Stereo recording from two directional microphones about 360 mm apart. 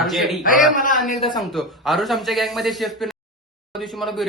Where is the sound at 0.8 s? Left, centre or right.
Left.